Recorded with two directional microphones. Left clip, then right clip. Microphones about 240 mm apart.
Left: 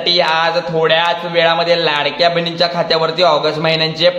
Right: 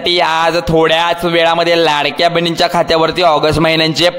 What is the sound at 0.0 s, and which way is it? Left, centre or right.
Speech, right.